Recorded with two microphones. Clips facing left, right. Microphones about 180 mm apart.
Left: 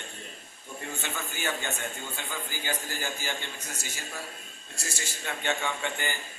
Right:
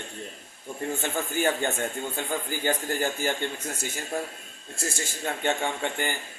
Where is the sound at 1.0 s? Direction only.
50° right (ahead or behind).